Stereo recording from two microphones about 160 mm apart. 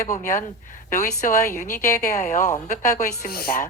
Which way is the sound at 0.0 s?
50° left (ahead or behind).